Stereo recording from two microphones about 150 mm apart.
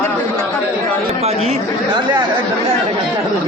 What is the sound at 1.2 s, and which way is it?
Chatter, 45° right (ahead or behind).